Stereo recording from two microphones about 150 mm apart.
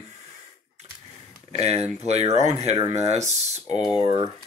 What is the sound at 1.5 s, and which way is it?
Speech, 45° right (ahead or behind).